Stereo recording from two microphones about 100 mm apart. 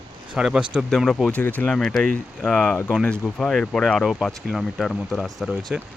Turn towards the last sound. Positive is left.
turn(degrees=-10)  # may be behind; listen again after turning